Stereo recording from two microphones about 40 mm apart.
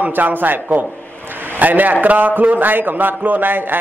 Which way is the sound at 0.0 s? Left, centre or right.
Right.